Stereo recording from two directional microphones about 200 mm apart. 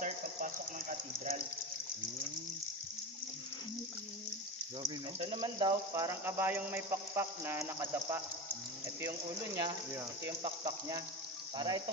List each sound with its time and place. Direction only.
0.0 s a sound: 40° right (ahead or behind)
5.4 s speech: 20° right (ahead or behind)
9.6 s speech: 15° right (ahead or behind)